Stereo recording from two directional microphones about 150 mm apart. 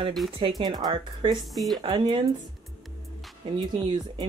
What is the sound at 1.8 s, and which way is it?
Speech, 35° right (ahead or behind).